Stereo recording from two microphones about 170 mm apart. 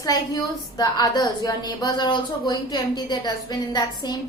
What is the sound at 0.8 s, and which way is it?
A woman's voice, 25° left (ahead or behind).